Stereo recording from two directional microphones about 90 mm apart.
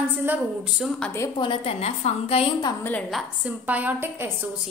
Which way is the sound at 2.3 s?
90° left.